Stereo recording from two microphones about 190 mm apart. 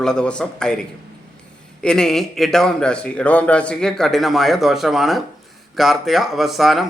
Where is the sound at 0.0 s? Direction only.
5° left (ahead or behind).